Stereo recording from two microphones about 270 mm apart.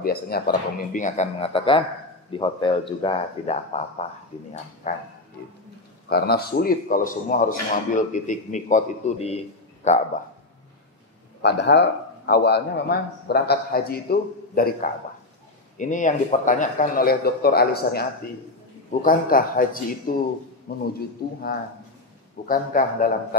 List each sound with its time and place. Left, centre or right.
0.0 s a man's voice: left
6.0 s a man's voice: left
11.4 s a man's voice: left
22.5 s a man's voice: left